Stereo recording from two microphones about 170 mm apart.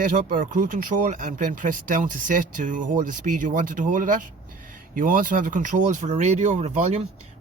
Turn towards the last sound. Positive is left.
turn(degrees=-45)  # may be behind; listen again after turning